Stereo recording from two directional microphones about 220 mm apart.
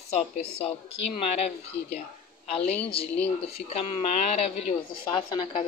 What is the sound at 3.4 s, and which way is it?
Speech, 30° left (ahead or behind).